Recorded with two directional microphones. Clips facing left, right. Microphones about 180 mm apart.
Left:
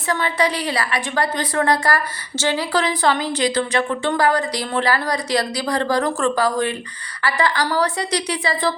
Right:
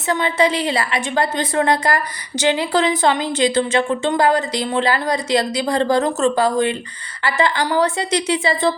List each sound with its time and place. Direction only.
0.1 s a woman's voice: 25° right (ahead or behind)